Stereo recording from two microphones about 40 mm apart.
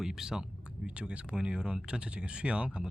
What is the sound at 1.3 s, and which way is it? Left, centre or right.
Speech, right.